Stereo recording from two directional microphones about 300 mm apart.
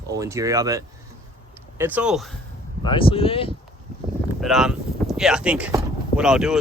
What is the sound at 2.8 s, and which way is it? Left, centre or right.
Speech, centre.